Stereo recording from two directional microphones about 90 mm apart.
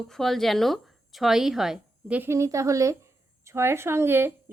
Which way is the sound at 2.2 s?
35° right (ahead or behind).